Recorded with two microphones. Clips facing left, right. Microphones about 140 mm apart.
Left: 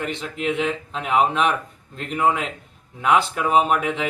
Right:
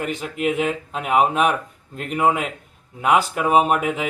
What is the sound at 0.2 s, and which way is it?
Speech, 10° right (ahead or behind).